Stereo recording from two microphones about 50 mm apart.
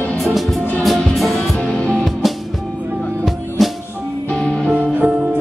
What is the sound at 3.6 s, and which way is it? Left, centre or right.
Music, centre.